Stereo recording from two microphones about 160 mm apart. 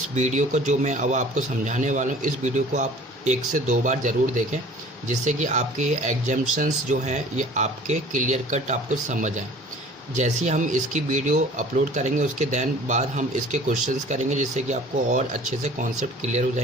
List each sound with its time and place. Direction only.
0.2 s speech: 50° right (ahead or behind)